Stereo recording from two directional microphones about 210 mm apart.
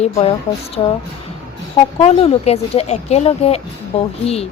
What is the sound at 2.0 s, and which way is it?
Speech, 30° left (ahead or behind).